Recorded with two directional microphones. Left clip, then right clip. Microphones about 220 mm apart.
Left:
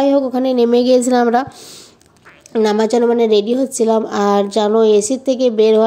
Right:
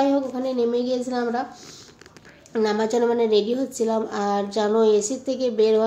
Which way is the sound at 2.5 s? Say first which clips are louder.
Left 8 dB; 30° left (ahead or behind).